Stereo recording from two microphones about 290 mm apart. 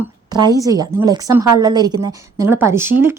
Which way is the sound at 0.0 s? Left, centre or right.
Centre.